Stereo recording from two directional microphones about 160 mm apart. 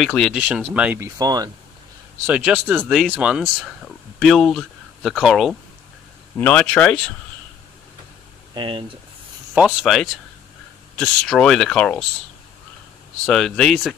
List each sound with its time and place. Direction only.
0.0 s speech: centre (ahead or behind); by 1.5 s 25° right (ahead or behind)
2.2 s speech: 5° right (ahead or behind)
8.5 s speech: 35° right (ahead or behind)
9.5 s speech: 5° right (ahead or behind)
13.2 s speech: 5° left (ahead or behind)